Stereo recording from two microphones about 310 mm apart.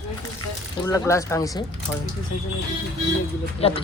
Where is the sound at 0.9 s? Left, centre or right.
Centre.